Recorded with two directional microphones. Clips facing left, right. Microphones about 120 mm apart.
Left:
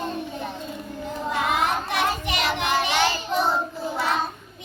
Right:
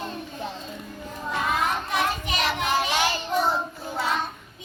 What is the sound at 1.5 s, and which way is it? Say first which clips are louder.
Child singing: even; 70° left (ahead or behind).